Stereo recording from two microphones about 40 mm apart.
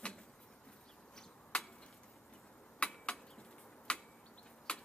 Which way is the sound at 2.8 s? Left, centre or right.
Left.